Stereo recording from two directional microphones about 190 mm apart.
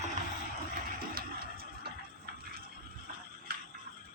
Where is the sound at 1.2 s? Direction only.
55° right (ahead or behind).